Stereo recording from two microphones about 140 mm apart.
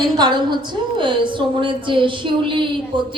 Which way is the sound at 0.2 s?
30° right (ahead or behind).